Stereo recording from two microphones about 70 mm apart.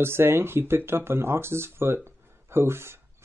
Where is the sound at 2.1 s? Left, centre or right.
Right.